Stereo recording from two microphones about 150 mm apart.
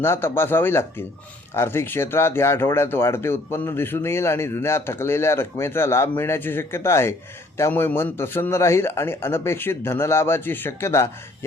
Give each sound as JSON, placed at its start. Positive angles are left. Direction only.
{"t": 0.0, "sound": "speech", "side_deg": 15}